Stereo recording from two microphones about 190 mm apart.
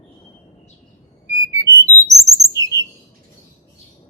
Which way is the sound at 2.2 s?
20° right (ahead or behind).